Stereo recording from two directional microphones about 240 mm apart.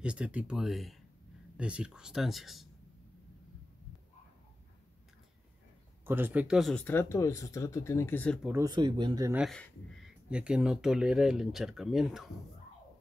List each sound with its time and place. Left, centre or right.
0.0 s speech: centre
6.0 s speech: centre
8.5 s speech: centre
9.4 s speech: centre